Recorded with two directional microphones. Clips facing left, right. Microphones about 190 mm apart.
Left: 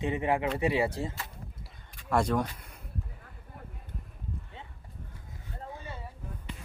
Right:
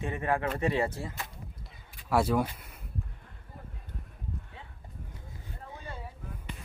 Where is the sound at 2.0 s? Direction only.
5° right (ahead or behind).